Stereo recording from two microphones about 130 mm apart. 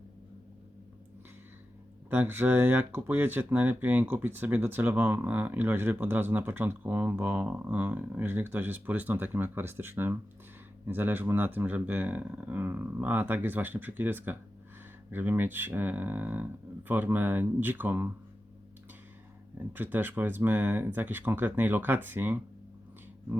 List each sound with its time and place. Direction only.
2.0 s speech: 15° right (ahead or behind)
19.5 s speech: 15° right (ahead or behind)